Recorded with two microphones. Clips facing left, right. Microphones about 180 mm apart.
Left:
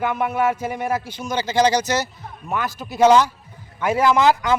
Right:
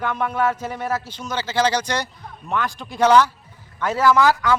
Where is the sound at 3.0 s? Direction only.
15° left (ahead or behind).